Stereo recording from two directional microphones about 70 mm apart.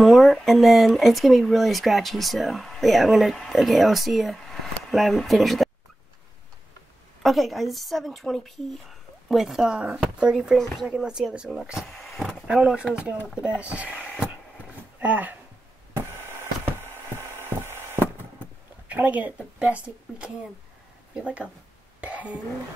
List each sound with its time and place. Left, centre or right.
0.0 s speech: centre
7.2 s speech: centre
12.0 s speech: centre
12.4 s speech: centre
15.0 s speech: right
15.9 s a sound: right
18.9 s speech: right
22.0 s throat clearing: right